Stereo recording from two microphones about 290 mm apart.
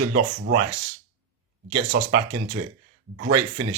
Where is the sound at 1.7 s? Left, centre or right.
Right.